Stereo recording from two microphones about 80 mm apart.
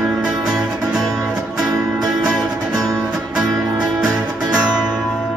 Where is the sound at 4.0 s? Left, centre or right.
Centre.